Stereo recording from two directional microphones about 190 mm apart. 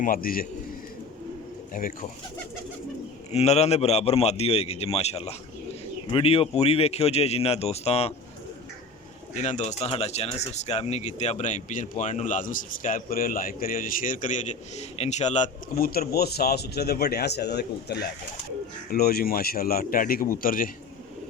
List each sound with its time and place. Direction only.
0.0 s speech: 50° left (ahead or behind)
1.7 s speech: 45° left (ahead or behind)
3.3 s a man's voice: 35° left (ahead or behind)
9.3 s speech: 40° left (ahead or behind)